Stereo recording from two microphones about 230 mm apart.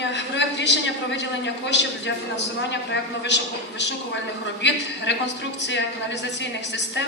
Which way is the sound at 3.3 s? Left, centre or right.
Left.